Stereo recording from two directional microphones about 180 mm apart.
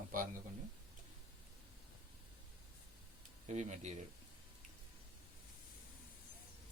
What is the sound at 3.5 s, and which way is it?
Speech, 40° right (ahead or behind).